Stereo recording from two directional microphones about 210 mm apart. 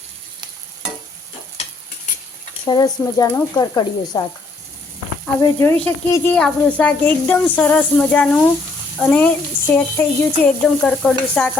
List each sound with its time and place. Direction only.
2.6 s speech: 20° left (ahead or behind)
5.4 s speech: 10° left (ahead or behind)
9.7 s stir: 10° left (ahead or behind)